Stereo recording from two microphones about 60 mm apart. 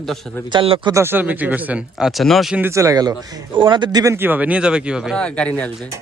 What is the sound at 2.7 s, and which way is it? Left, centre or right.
Speech, right.